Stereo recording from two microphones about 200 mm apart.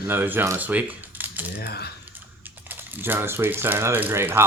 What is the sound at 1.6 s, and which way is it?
Speech, 50° left (ahead or behind).